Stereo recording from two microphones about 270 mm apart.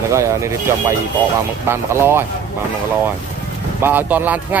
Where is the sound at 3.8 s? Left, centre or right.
Centre.